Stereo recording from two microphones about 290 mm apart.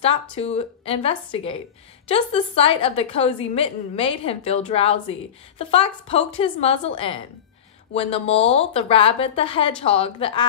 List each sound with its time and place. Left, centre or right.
0.0 s a woman's voice: left